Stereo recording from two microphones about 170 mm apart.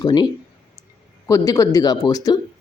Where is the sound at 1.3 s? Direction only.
20° left (ahead or behind).